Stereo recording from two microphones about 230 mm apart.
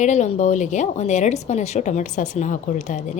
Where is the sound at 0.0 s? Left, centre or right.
Left.